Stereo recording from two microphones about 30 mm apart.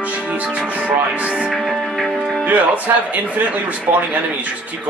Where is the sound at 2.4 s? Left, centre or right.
Right.